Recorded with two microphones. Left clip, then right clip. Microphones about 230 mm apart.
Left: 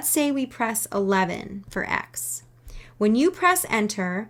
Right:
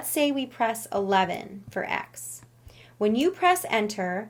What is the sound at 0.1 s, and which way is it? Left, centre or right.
A woman's voice, left.